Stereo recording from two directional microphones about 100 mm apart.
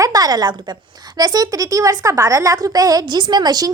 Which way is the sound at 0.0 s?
40° right (ahead or behind).